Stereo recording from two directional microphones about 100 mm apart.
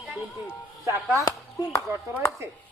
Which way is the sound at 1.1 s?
40° left (ahead or behind).